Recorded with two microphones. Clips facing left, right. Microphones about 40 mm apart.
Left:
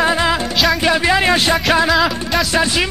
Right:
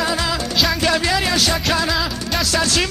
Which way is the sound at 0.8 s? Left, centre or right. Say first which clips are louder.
Left 4 dB; left.